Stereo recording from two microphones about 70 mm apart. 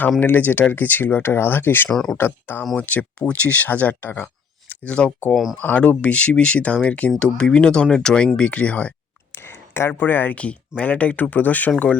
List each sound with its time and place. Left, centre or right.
0.2 s speech: left
2.7 s speech: centre
5.3 s speech: centre
5.6 s speech: left
9.3 s speech: left